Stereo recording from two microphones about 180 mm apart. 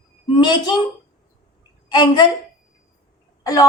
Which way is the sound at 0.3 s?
25° left (ahead or behind).